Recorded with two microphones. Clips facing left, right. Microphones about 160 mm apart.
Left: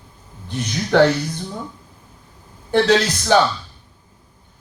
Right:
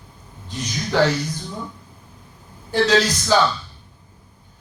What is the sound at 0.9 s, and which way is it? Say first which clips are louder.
Speech: left 5 dB; 60° left (ahead or behind).